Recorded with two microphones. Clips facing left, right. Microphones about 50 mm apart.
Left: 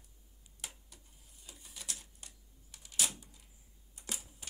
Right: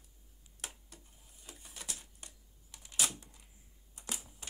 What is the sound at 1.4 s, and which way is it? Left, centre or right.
Typewriter, right.